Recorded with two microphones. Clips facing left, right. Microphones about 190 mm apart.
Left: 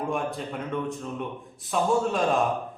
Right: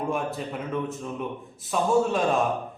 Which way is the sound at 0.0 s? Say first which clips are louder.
Right 1 dB; centre (ahead or behind).